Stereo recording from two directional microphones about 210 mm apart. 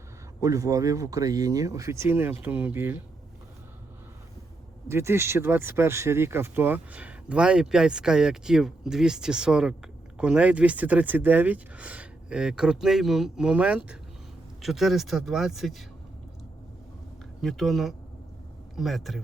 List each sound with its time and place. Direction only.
0.4 s speech: 15° right (ahead or behind)
4.9 s speech: 10° right (ahead or behind)
17.4 s speech: centre (ahead or behind)